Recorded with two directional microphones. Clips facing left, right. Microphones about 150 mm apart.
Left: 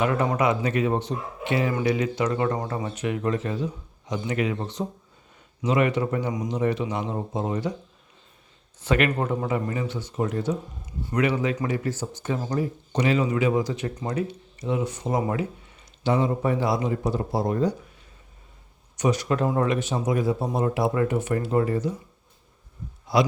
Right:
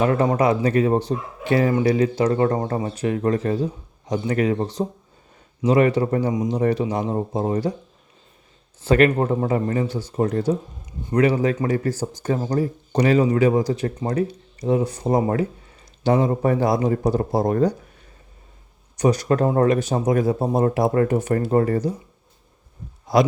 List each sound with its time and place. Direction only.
0.0 s speech: 35° right (ahead or behind)
8.8 s a man's voice: 35° right (ahead or behind); by 17.7 s 50° right (ahead or behind)
18.9 s a man's voice: 40° right (ahead or behind)